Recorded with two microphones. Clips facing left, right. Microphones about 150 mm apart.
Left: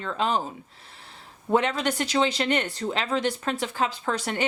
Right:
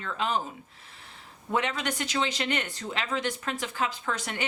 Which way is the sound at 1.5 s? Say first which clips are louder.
Left 6 dB; 35° left (ahead or behind).